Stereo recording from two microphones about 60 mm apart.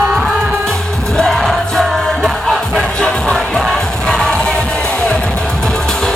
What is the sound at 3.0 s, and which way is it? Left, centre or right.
Music, centre.